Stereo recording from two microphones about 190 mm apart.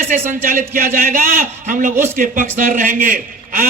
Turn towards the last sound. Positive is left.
turn(degrees=-45)  # may be behind; listen again after turning